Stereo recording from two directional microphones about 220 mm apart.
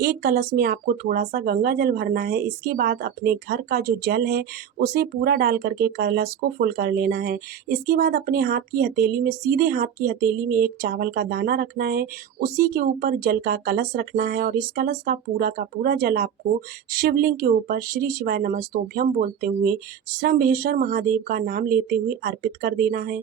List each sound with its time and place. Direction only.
0.0 s speech: 40° right (ahead or behind)